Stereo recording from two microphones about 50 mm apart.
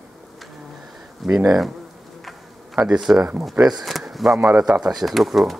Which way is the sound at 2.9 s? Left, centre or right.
Centre.